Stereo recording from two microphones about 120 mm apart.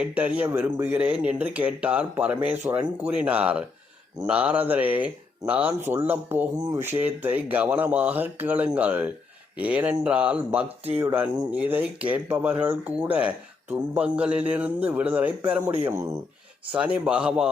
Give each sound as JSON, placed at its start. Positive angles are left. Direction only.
{"t": 0.0, "sound": "speech", "side_deg": -10}
{"t": 15.8, "sound": "speech", "side_deg": -25}
{"t": 16.7, "sound": "speech", "side_deg": -10}